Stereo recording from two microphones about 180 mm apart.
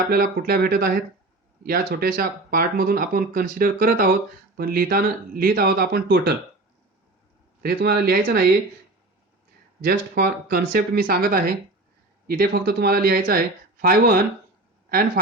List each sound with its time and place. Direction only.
0.1 s speech: 55° right (ahead or behind)
7.6 s speech: 60° right (ahead or behind)
9.8 s speech: 60° right (ahead or behind)